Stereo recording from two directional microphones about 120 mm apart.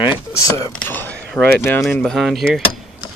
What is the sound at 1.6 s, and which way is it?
Speech, 20° left (ahead or behind).